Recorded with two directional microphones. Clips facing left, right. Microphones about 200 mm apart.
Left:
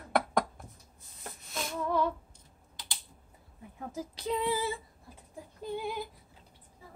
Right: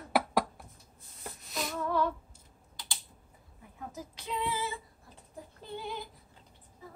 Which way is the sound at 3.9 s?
35° left (ahead or behind).